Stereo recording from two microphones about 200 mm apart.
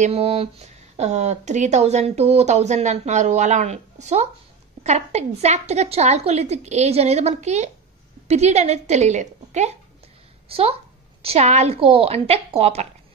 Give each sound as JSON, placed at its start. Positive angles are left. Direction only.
{"t": 0.0, "sound": "a woman's voice", "side_deg": -30}